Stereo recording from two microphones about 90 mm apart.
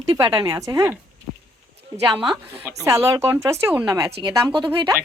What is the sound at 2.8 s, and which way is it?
Speech, 35° right (ahead or behind).